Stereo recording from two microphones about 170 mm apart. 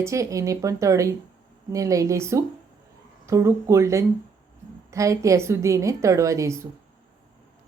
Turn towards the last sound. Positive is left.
turn(degrees=-15)  # may be behind; listen again after turning